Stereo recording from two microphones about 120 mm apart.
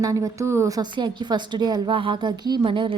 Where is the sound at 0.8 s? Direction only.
40° right (ahead or behind).